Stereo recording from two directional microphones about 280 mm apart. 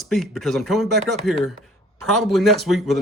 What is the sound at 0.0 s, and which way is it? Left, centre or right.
Speech, centre.